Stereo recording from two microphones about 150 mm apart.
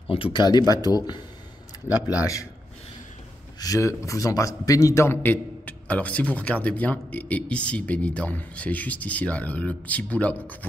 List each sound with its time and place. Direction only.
0.1 s a man's voice: 35° left (ahead or behind)
1.9 s a man's voice: 10° right (ahead or behind)
3.5 s a man's voice: 25° left (ahead or behind)